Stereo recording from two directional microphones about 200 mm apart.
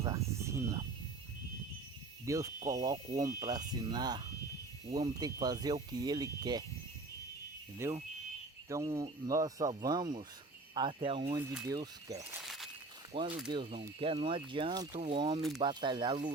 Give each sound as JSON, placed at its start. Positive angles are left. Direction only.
{"t": 0.0, "sound": "cricket", "side_deg": -15}
{"t": 2.2, "sound": "speech", "side_deg": -15}
{"t": 7.8, "sound": "speech", "side_deg": -15}
{"t": 11.3, "sound": "speech", "side_deg": -15}
{"t": 12.4, "sound": "walk", "side_deg": 0}
{"t": 13.1, "sound": "speech", "side_deg": -25}